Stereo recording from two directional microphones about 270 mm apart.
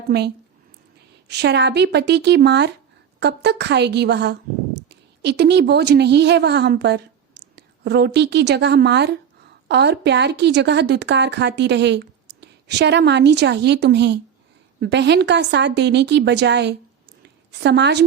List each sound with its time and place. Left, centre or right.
1.3 s a woman's voice: right